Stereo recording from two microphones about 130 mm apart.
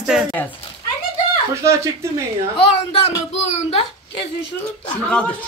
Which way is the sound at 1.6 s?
25° right (ahead or behind).